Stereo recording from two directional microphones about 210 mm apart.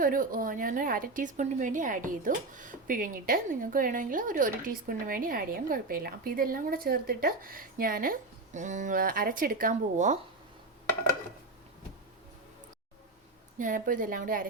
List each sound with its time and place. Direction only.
0.0 s a woman's voice: 40° right (ahead or behind)
13.6 s a woman's voice: 40° right (ahead or behind)